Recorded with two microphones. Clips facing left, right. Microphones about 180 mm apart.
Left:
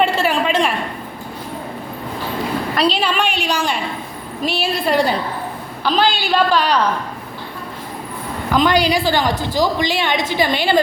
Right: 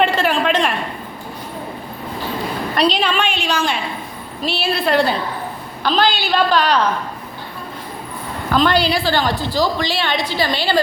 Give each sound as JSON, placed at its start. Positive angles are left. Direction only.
{"t": 0.0, "sound": "a sound", "side_deg": 10}
{"t": 2.7, "sound": "a woman's voice", "side_deg": 5}
{"t": 8.5, "sound": "a woman's voice", "side_deg": 15}